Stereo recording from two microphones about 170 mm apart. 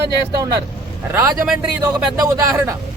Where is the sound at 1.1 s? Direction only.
10° right (ahead or behind).